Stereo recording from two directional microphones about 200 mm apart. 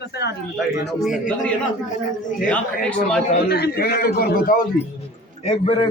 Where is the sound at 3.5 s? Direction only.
50° left (ahead or behind).